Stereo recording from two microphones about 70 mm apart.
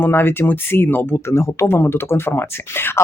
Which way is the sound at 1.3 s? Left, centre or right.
Left.